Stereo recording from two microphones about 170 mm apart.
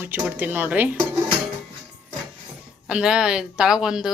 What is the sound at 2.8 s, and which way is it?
Speech, 5° right (ahead or behind).